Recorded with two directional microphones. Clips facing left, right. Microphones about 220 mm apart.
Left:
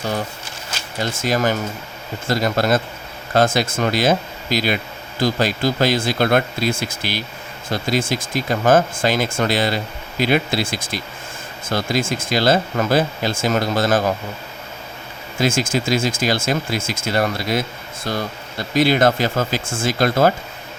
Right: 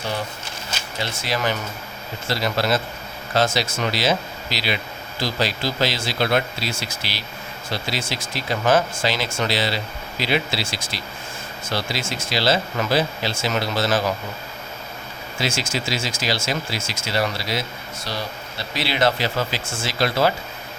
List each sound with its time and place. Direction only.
0.9 s speech: 45° left (ahead or behind)
15.4 s speech: 50° left (ahead or behind)